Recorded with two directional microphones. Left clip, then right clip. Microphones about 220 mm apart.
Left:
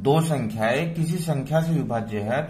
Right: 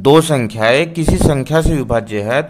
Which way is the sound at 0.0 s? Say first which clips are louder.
Right 12 dB; 40° right (ahead or behind).